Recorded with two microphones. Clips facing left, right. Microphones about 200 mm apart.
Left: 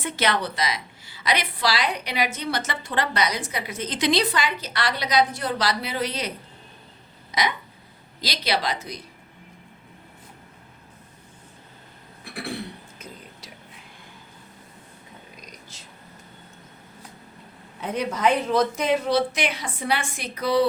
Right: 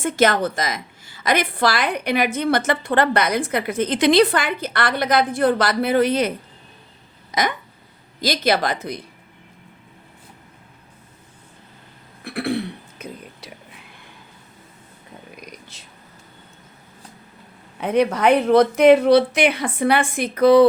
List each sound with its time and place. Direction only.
0.0 s a woman's voice: 45° right (ahead or behind)
7.3 s a sound: 50° right (ahead or behind)
8.2 s a woman's voice: 50° right (ahead or behind)
12.2 s cough: 60° right (ahead or behind)
13.0 s whispering: 60° right (ahead or behind)
15.7 s whispering: 60° right (ahead or behind)
17.7 s speech: 65° right (ahead or behind)